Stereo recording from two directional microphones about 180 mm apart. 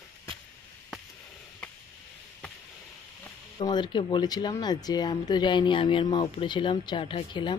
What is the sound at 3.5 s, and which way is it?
Speech, 25° left (ahead or behind).